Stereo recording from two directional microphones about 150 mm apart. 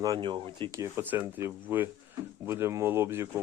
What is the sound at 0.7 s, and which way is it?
Speech, 15° right (ahead or behind).